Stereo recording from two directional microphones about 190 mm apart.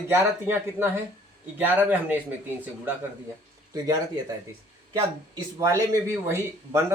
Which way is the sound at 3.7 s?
20° right (ahead or behind).